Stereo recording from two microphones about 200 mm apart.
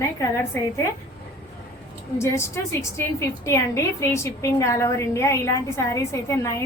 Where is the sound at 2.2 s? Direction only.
15° left (ahead or behind).